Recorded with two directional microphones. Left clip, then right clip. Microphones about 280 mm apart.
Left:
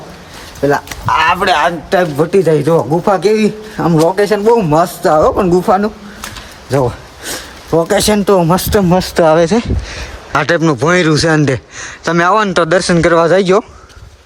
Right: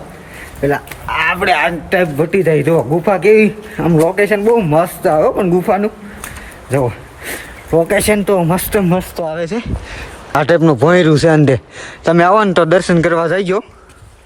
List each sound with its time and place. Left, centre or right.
0.9 s a man's voice: centre